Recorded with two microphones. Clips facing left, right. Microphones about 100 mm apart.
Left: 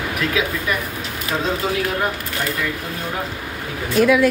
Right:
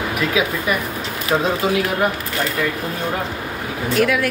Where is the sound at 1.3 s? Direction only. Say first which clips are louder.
Right 5 dB; 30° right (ahead or behind).